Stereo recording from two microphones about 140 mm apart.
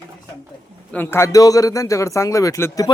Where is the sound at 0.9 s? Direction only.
15° left (ahead or behind).